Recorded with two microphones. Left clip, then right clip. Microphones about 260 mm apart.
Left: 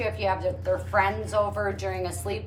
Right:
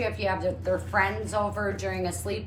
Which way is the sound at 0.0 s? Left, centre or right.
Centre.